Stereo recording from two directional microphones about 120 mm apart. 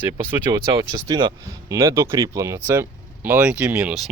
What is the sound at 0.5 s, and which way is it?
Speech, 35° right (ahead or behind).